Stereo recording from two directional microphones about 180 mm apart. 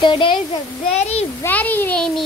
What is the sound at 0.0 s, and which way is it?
A child's voice, 25° left (ahead or behind).